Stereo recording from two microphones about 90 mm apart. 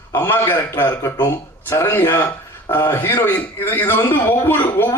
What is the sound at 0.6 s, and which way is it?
A man's voice, 20° left (ahead or behind).